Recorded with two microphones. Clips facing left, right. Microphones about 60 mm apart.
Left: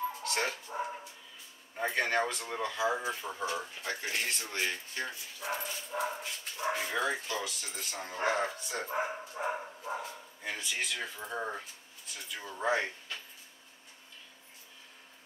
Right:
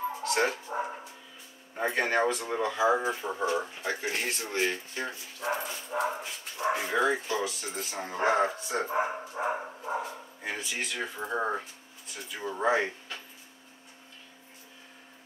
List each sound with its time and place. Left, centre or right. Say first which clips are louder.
0.1 s dog: right 6 dB; centre
1.8 s speech: right 3 dB; centre
12.1 s speech: right 6 dB; centre